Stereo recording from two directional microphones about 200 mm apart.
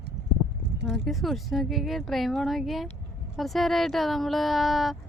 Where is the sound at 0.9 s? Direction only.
Centre (ahead or behind).